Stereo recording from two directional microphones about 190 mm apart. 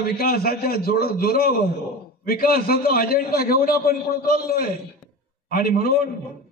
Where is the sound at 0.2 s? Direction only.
50° left (ahead or behind).